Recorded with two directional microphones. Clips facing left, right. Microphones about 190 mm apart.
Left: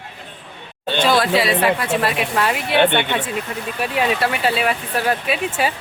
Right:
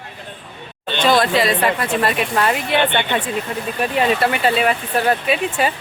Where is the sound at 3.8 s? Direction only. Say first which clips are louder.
Right 2 dB; 5° left (ahead or behind).